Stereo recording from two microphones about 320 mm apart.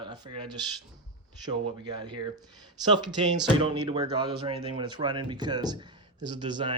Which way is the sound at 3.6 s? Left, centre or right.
Centre.